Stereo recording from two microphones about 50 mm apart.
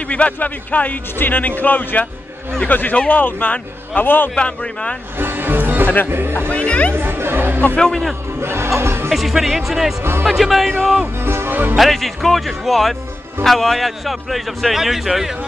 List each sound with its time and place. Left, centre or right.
0.1 s speech: left
4.4 s speech: left
5.2 s music: right
6.0 s speech: right
6.5 s speech: left
7.0 s speech: right
7.8 s a man's voice: centre
8.4 s speech: right
9.1 s a man's voice: centre
11.2 s speech: right
11.7 s a man's voice: centre